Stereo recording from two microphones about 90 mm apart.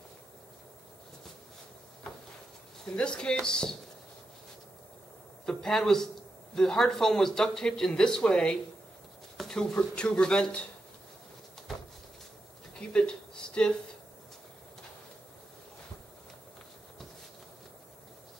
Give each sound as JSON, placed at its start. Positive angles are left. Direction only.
{"t": 2.8, "sound": "speech", "side_deg": 10}
{"t": 5.4, "sound": "a man's voice", "side_deg": 5}
{"t": 12.9, "sound": "a sound", "side_deg": 10}